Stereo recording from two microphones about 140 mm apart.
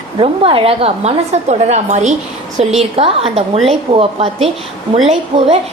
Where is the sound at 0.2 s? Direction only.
40° right (ahead or behind).